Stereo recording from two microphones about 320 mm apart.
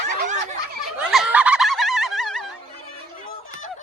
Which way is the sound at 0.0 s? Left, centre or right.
Right.